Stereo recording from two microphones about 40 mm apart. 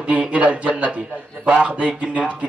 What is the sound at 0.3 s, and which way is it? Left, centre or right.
A man's voice, right.